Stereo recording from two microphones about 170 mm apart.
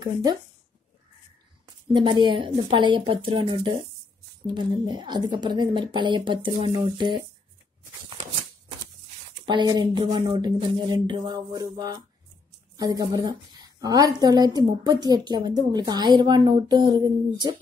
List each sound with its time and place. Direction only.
0.0 s a woman's voice: 25° right (ahead or behind)
2.0 s a woman's voice: 30° right (ahead or behind)
9.5 s a woman's voice: 25° right (ahead or behind)